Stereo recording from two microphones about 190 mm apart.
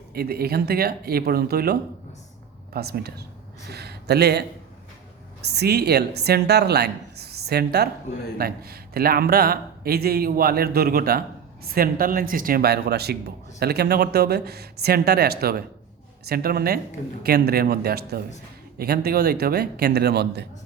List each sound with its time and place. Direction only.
0.1 s a man's voice: 55° right (ahead or behind)